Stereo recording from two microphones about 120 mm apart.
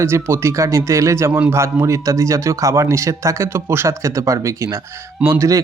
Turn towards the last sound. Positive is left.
turn(degrees=-20)  # may be behind; listen again after turning